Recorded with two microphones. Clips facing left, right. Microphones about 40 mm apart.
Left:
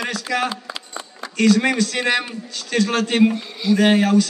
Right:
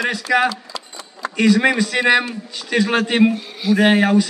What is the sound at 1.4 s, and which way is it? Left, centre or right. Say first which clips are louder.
A man's voice: right 1 dB; centre.